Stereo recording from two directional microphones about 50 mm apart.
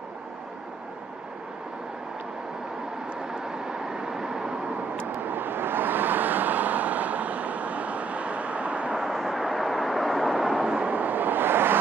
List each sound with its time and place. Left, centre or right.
3.3 s vehicle: centre
5.2 s vehicle: right
8.9 s vehicle: centre
10.7 s vehicle: right